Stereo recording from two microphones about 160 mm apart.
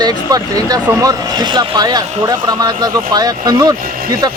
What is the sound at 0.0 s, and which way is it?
Speech, 25° right (ahead or behind).